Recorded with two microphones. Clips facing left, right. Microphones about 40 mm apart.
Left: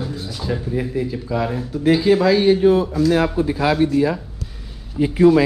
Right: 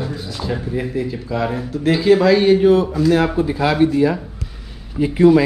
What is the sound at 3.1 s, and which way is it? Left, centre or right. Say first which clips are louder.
Speech: right 1 dB; right.